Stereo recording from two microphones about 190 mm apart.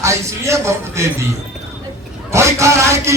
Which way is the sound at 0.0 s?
15° right (ahead or behind).